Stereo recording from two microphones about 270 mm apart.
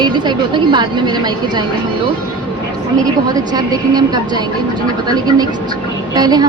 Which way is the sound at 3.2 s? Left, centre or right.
Centre.